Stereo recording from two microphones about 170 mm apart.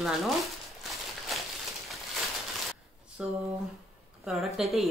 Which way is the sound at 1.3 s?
Centre (ahead or behind).